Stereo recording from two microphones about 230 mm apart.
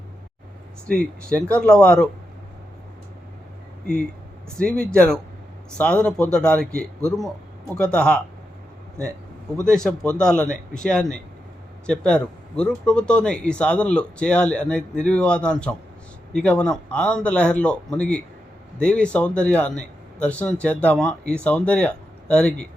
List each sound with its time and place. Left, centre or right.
0.9 s speech: centre
4.6 s speech: centre
7.8 s speech: centre
9.6 s speech: centre